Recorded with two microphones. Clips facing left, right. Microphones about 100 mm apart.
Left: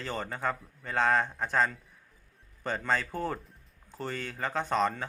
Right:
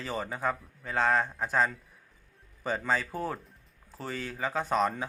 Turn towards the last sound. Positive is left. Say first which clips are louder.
# right 1 dB
turn(degrees=-5)  # may be behind; listen again after turning